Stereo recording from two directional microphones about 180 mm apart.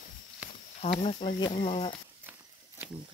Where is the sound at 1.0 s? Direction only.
35° left (ahead or behind).